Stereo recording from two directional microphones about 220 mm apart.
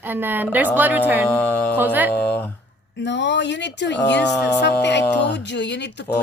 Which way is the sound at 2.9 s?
55° left (ahead or behind).